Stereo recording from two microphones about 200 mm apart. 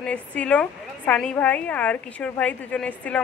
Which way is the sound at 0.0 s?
5° left (ahead or behind).